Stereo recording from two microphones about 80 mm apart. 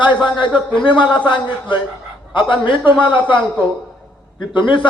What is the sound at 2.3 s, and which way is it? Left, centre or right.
A man's voice, left.